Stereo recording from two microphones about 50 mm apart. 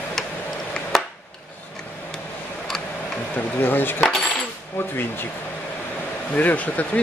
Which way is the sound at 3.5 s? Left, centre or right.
Left.